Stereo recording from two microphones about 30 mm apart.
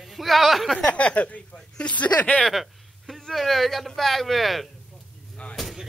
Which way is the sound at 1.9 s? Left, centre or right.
Left.